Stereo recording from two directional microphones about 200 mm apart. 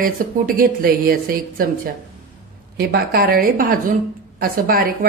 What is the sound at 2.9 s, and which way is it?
A woman's voice, 50° right (ahead or behind).